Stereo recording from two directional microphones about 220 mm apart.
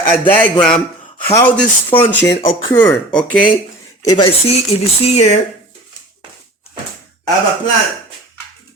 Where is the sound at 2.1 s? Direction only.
50° left (ahead or behind).